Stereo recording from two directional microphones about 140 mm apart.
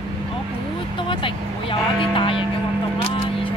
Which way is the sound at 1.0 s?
40° left (ahead or behind).